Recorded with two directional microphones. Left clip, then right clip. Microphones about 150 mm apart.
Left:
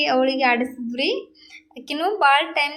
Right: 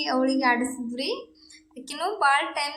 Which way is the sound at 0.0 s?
20° left (ahead or behind).